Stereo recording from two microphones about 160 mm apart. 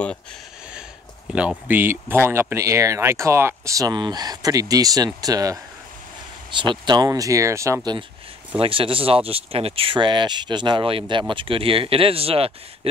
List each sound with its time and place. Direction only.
1.3 s speech: 5° right (ahead or behind); by 8.0 s 20° right (ahead or behind)
8.5 s speech: 35° right (ahead or behind)